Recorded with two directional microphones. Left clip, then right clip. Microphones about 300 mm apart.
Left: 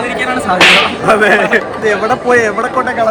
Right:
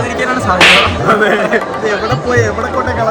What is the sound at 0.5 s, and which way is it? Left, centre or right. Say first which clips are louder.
Whip: even; centre.